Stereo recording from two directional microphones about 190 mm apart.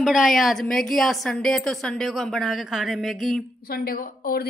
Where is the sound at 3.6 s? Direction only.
50° left (ahead or behind).